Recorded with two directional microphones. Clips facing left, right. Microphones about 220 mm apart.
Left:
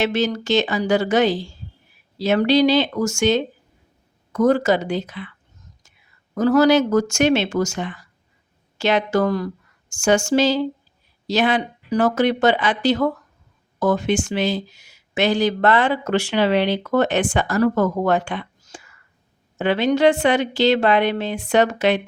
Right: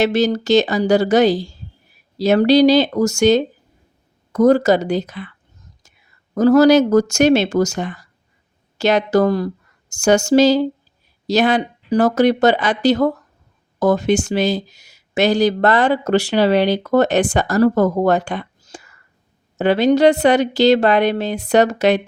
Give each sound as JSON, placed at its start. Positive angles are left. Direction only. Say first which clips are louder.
{"t": 0.0, "sound": "speech", "louder": "right 5 dB", "side_deg": -40}
{"t": 6.3, "sound": "speech", "louder": "right 4 dB", "side_deg": -40}